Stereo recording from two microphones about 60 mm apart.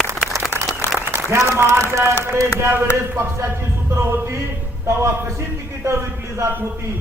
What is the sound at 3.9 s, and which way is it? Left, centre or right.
A man's voice, right.